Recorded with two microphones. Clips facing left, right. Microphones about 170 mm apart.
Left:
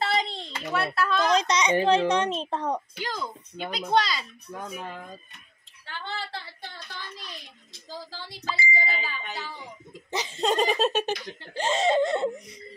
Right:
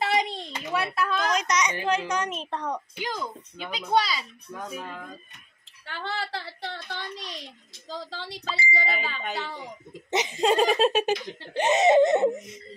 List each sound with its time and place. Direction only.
0.0 s hands: 15° right (ahead or behind)
1.3 s a child's voice: 30° left (ahead or behind)
3.0 s speech: 10° right (ahead or behind)
5.9 s a sound: 65° right (ahead or behind)
7.9 s speech: 75° right (ahead or behind)
10.1 s speech: 20° right (ahead or behind)
10.4 s speech: 5° right (ahead or behind)
11.1 s speech: 20° right (ahead or behind)